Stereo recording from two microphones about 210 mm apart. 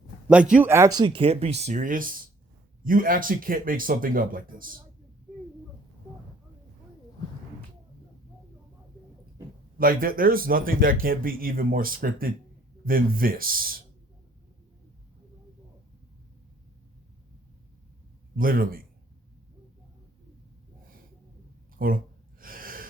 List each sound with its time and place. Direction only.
0.5 s speech: 10° right (ahead or behind); by 4.7 s 40° right (ahead or behind)
9.7 s speech: 45° right (ahead or behind)
18.3 s speech: 45° right (ahead or behind)
21.8 s speech: 45° right (ahead or behind)
22.4 s gasp: 40° right (ahead or behind)